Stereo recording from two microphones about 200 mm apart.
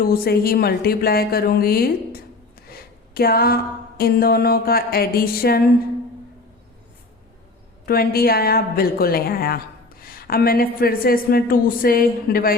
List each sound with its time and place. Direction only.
0.0 s speech: 50° left (ahead or behind)
7.9 s speech: 50° left (ahead or behind)